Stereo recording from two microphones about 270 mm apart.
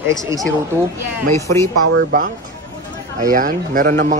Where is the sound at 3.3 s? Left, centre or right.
Right.